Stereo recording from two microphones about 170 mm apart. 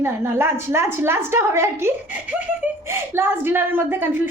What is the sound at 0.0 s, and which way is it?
A woman's voice, 15° right (ahead or behind).